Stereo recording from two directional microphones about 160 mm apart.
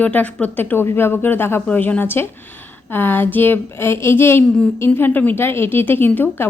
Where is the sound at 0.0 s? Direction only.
10° left (ahead or behind).